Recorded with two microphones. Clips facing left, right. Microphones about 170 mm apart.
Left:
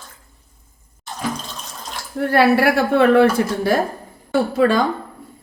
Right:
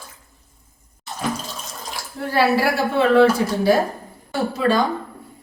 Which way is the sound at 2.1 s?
60° left (ahead or behind).